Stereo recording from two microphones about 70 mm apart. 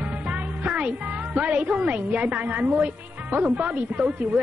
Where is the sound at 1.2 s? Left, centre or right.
Centre.